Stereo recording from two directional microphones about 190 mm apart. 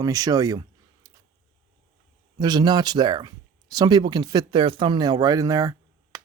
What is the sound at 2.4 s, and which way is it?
Speech, 20° right (ahead or behind).